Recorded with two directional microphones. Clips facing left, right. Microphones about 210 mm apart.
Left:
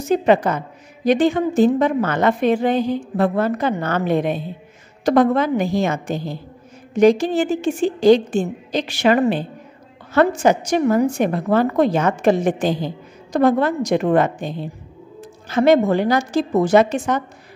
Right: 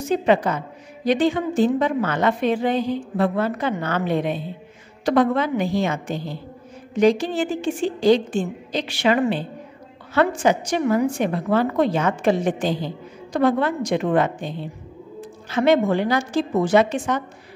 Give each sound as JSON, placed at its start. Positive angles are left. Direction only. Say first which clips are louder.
{"t": 0.1, "sound": "a woman's voice", "louder": "left 3 dB", "side_deg": 45}